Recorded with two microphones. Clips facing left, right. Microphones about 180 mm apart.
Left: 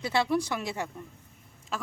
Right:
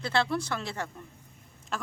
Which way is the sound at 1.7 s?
5° left (ahead or behind).